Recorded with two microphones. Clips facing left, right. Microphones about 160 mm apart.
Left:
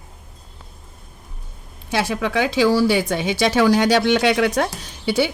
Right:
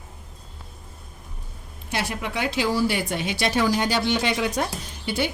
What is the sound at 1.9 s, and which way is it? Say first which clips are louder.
Speech: left 7 dB; 90° left.